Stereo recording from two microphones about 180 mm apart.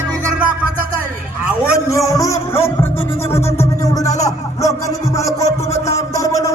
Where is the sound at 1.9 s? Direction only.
15° left (ahead or behind).